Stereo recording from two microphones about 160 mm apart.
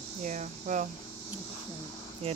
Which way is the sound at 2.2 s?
40° right (ahead or behind).